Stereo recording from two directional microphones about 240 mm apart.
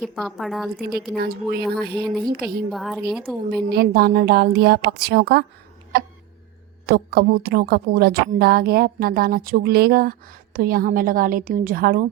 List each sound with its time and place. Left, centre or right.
0.0 s a woman's voice: centre
0.8 s a woman's voice: right
2.7 s a woman's voice: centre
3.7 s a woman's voice: right